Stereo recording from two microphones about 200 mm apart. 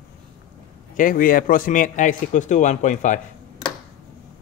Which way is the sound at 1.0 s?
45° left (ahead or behind).